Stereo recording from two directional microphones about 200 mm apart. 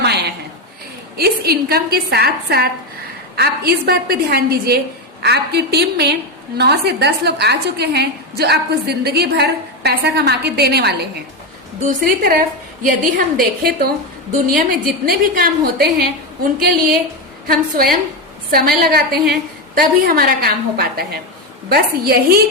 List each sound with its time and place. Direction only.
0.0 s a sound: 55° right (ahead or behind)
1.1 s a woman's voice: 50° right (ahead or behind)
17.4 s a woman's voice: 50° right (ahead or behind)